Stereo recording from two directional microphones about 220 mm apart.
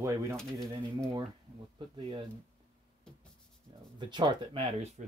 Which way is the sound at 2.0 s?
25° right (ahead or behind).